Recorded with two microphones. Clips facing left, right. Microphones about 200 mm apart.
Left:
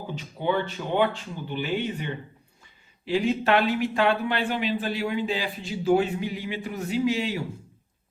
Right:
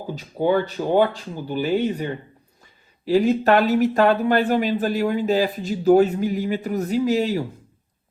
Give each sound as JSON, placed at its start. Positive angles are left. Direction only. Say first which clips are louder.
{"t": 0.1, "sound": "speech", "louder": "right 7 dB", "side_deg": -40}